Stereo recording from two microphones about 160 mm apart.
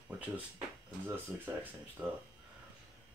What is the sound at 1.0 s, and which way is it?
Speech, 10° right (ahead or behind).